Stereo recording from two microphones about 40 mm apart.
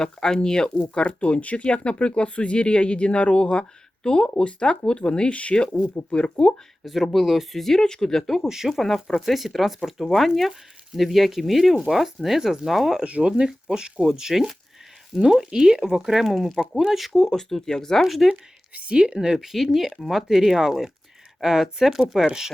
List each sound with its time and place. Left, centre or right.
0.0 s speech: centre
6.8 s speech: centre
7.6 s speech: centre
8.4 s speech: centre
8.7 s speech: centre
13.1 s speech: right
13.3 s speech: right
17.2 s speech: centre
18.0 s speech: centre
18.7 s speech: right
18.9 s speech: right
19.5 s speech: centre